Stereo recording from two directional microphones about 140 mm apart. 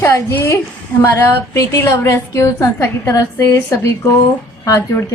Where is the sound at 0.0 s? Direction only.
20° left (ahead or behind).